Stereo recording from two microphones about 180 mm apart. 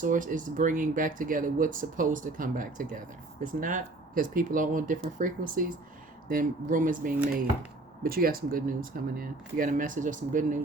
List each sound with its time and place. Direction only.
0.0 s speech: 45° right (ahead or behind)